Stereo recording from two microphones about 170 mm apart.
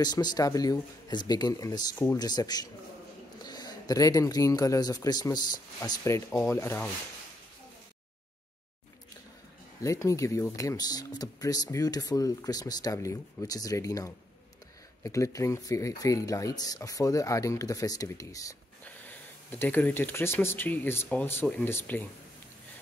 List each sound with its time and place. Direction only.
0.0 s speech: 25° left (ahead or behind)
9.8 s speech: 20° left (ahead or behind)
18.9 s speech: 10° left (ahead or behind)